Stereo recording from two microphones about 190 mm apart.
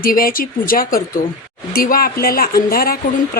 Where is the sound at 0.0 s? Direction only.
50° left (ahead or behind).